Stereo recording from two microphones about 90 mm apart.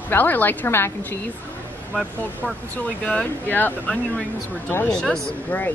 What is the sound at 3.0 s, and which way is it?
A woman's voice, 15° left (ahead or behind).